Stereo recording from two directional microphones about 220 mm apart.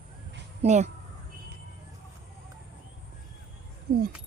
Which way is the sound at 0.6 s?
30° right (ahead or behind).